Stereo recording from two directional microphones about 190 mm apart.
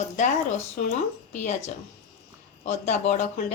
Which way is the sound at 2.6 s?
35° left (ahead or behind).